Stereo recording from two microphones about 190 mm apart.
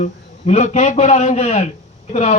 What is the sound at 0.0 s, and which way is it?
Speech, 35° left (ahead or behind).